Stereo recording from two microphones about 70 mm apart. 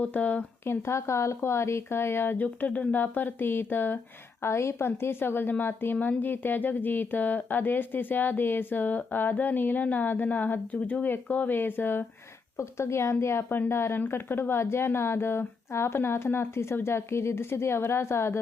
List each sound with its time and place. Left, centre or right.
0.0 s a woman's voice: left
0.6 s a woman's voice: left
12.5 s speech: left